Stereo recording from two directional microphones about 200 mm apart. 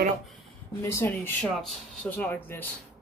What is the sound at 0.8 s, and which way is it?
Speech, 10° left (ahead or behind).